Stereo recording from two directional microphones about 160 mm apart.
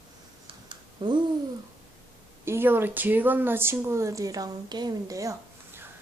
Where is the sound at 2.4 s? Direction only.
15° right (ahead or behind).